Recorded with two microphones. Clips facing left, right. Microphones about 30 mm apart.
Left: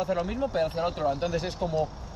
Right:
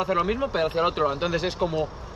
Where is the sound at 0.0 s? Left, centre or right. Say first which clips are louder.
Right 4 dB; right.